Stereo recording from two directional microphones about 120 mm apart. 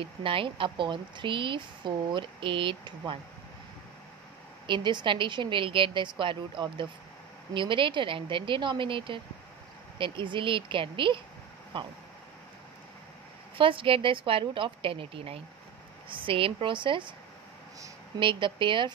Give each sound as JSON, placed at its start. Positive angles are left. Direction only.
{"t": 0.0, "sound": "speech", "side_deg": -45}
{"t": 4.6, "sound": "speech", "side_deg": -40}
{"t": 13.6, "sound": "speech", "side_deg": -45}
{"t": 18.2, "sound": "speech", "side_deg": -45}